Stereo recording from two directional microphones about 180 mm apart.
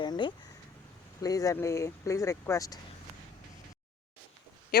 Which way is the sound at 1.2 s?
20° left (ahead or behind).